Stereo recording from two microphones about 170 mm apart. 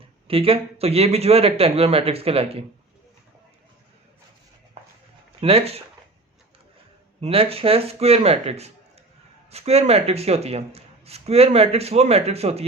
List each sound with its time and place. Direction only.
0.3 s speech: 35° right (ahead or behind)
5.4 s speech: 35° right (ahead or behind)
7.2 s speech: 35° right (ahead or behind)